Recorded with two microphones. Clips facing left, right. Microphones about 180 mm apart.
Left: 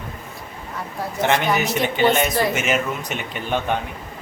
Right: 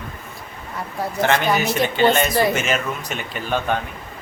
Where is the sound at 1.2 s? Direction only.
20° left (ahead or behind).